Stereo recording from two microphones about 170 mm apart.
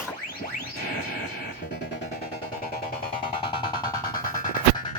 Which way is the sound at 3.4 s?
30° left (ahead or behind).